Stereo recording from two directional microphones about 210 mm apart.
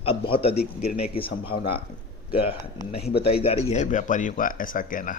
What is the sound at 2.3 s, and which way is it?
Speech, 25° left (ahead or behind).